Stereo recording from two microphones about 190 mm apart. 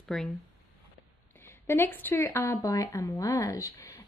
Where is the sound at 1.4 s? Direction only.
15° left (ahead or behind).